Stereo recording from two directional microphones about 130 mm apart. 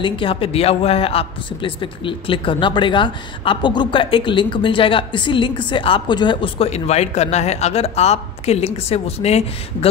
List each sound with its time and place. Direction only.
0.0 s a man's voice: 45° left (ahead or behind)